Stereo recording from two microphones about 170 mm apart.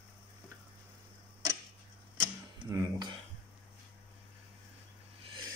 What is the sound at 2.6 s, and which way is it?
Speech, 20° right (ahead or behind).